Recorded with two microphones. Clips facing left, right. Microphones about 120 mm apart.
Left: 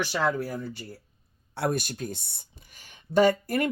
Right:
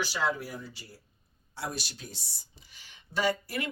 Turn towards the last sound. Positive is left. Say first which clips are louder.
# left 8 dB
turn(degrees=50)  # may be behind; listen again after turning